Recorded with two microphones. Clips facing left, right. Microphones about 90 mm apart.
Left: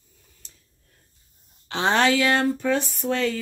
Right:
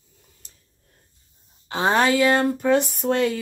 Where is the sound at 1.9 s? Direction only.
5° right (ahead or behind).